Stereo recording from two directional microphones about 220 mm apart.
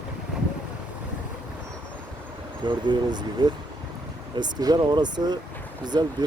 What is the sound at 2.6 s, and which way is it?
Speech, 20° right (ahead or behind).